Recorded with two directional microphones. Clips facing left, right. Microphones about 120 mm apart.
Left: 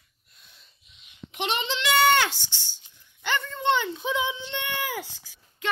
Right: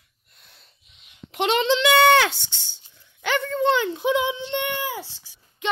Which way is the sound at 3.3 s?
75° right (ahead or behind).